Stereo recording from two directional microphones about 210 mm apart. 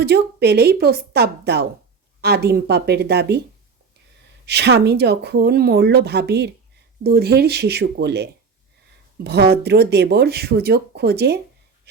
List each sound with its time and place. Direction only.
0.0 s speech: 50° right (ahead or behind)
4.4 s speech: 55° right (ahead or behind)